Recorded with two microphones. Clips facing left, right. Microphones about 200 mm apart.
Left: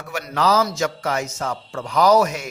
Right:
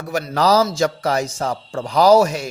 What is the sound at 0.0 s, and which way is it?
A man's voice, 35° right (ahead or behind).